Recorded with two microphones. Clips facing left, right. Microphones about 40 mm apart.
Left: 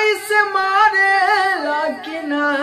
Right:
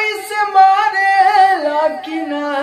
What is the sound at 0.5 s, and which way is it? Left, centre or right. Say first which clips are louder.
Singing: right 8 dB; centre.